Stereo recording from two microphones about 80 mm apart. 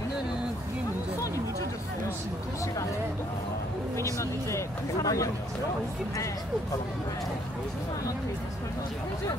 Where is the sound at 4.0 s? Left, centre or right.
Left.